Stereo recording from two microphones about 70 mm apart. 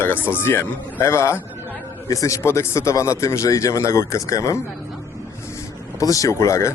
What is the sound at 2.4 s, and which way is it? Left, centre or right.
A man's voice, left.